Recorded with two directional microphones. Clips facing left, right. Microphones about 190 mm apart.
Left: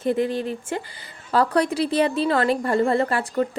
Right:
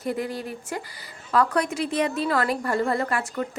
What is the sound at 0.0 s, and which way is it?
A woman's voice, 25° left (ahead or behind).